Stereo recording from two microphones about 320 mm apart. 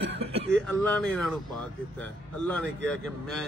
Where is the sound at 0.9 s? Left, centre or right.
Centre.